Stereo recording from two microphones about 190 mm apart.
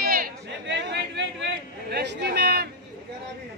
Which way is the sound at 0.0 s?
50° right (ahead or behind).